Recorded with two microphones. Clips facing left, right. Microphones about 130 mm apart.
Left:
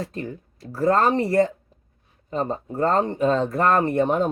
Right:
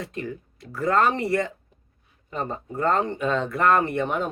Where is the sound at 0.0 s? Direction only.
35° left (ahead or behind).